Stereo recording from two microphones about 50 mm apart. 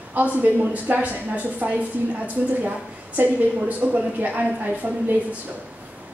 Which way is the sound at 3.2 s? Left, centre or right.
Right.